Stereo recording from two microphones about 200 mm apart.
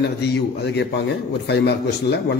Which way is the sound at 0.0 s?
55° left (ahead or behind).